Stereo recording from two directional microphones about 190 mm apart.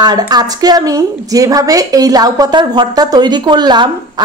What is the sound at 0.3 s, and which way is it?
A woman's voice, 20° right (ahead or behind).